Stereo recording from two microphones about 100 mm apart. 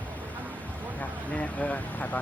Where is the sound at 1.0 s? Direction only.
15° left (ahead or behind).